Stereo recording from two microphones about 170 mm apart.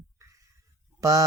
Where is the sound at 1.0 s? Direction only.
20° right (ahead or behind).